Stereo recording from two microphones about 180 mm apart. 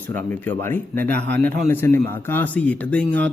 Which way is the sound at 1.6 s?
15° left (ahead or behind).